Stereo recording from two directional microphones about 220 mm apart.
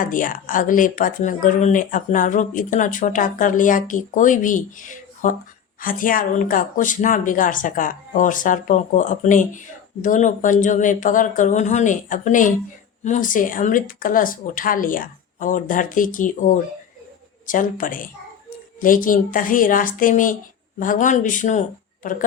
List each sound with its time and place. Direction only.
0.0 s speech: 40° left (ahead or behind)